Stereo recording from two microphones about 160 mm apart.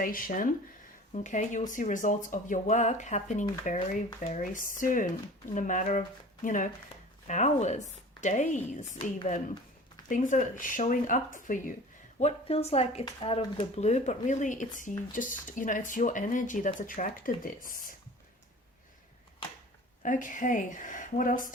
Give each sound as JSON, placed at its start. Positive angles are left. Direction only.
{"t": 0.0, "sound": "speech", "side_deg": 60}
{"t": 9.0, "sound": "speech", "side_deg": 35}
{"t": 10.1, "sound": "speech", "side_deg": 50}
{"t": 12.2, "sound": "speech", "side_deg": 40}
{"t": 20.0, "sound": "speech", "side_deg": 55}